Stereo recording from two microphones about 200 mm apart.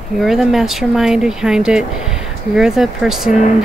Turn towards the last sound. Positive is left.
turn(degrees=0)  # may be behind; listen again after turning